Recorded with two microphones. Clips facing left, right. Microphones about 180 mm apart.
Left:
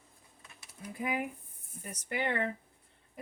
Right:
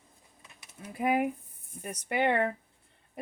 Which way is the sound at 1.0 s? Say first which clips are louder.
Right 8 dB; 60° right (ahead or behind).